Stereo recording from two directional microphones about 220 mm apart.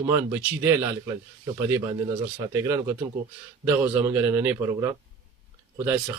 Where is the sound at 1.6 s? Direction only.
15° right (ahead or behind).